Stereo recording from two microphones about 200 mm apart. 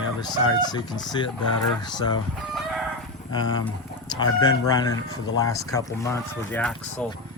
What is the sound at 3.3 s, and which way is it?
Speech, 20° left (ahead or behind).